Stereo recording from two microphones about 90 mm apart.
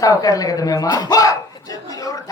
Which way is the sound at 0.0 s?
40° left (ahead or behind).